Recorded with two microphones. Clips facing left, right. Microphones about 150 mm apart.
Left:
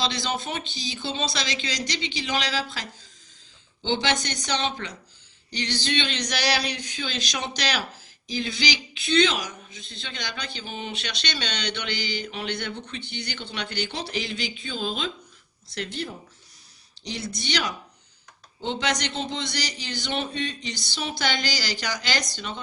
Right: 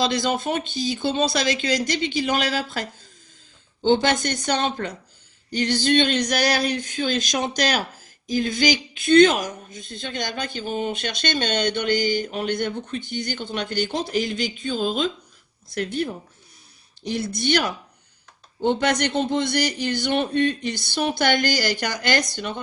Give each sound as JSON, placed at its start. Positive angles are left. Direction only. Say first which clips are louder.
{"t": 0.0, "sound": "a man's voice", "louder": "right 6 dB", "side_deg": -50}